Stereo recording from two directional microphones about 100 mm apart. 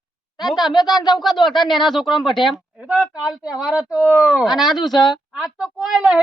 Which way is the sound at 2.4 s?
55° left (ahead or behind).